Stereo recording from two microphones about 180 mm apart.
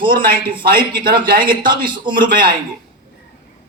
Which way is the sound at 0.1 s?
55° right (ahead or behind).